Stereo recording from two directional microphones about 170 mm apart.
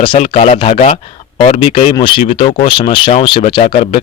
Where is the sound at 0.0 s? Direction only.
30° left (ahead or behind).